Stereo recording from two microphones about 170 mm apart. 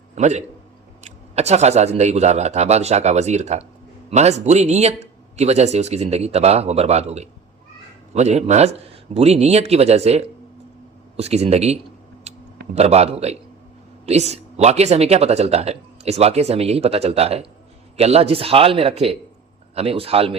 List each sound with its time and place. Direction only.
0.2 s a man's voice: 45° right (ahead or behind)
12.3 s a sound: 40° right (ahead or behind)
12.7 s speech: 40° right (ahead or behind)